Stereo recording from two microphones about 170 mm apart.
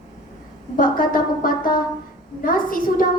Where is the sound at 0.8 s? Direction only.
55° left (ahead or behind).